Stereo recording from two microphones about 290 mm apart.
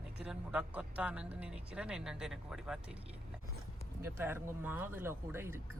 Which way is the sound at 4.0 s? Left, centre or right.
Centre.